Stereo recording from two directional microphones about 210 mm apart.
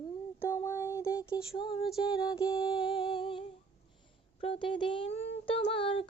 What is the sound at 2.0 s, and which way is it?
Child singing, 20° left (ahead or behind).